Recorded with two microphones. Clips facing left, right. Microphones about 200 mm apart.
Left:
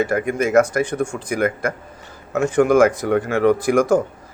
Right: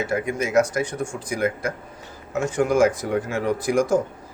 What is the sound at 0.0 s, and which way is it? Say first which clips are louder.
Speech: left 5 dB; 55° left (ahead or behind).